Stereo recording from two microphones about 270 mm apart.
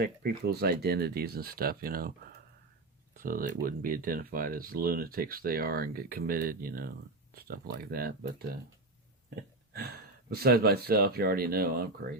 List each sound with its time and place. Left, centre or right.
0.0 s speech: right
3.2 s speech: right